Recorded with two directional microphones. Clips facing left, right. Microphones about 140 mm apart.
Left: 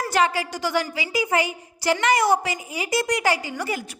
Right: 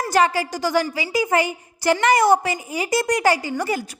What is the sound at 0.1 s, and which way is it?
A woman's voice, 40° right (ahead or behind).